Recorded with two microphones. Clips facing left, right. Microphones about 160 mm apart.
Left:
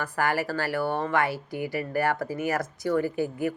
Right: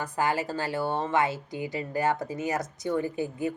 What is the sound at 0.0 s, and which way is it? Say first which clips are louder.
Speech: left 1 dB; 20° right (ahead or behind).